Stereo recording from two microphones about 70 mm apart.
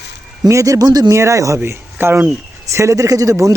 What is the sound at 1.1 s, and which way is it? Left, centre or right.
A man's voice, right.